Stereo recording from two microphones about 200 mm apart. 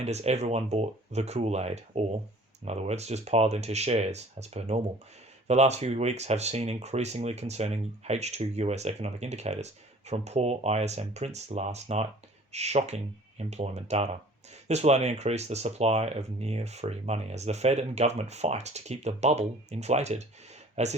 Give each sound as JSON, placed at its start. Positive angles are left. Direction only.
{"t": 0.0, "sound": "speech", "side_deg": -35}